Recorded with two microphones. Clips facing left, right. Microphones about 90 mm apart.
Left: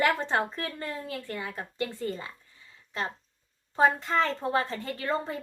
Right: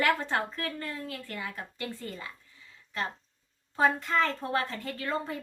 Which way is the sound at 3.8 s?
25° left (ahead or behind).